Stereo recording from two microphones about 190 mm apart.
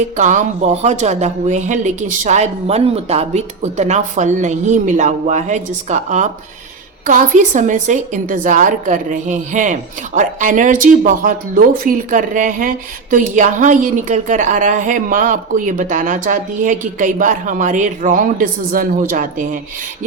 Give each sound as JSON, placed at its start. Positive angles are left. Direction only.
{"t": 0.2, "sound": "speech", "side_deg": -40}